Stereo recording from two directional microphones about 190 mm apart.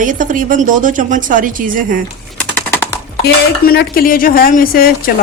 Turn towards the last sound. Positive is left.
turn(degrees=50)  # may be behind; listen again after turning